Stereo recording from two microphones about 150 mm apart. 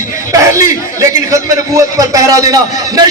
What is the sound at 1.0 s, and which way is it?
A man's voice, 20° right (ahead or behind).